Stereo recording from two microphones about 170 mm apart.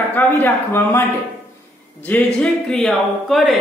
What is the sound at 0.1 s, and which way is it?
Speech, 10° left (ahead or behind).